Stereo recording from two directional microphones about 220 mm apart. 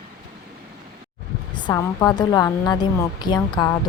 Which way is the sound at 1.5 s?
15° left (ahead or behind).